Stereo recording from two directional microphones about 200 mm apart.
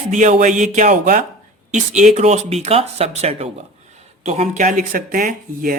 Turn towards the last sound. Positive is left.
turn(degrees=-45)  # may be behind; listen again after turning